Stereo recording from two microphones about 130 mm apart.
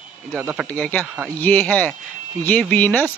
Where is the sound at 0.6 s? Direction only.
10° left (ahead or behind).